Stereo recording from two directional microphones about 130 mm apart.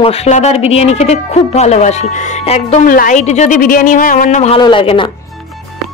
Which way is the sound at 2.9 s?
85° left.